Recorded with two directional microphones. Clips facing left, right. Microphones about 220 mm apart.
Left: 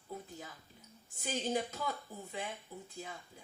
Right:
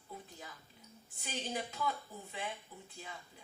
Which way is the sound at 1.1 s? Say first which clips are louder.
Left 5 dB; 45° left (ahead or behind).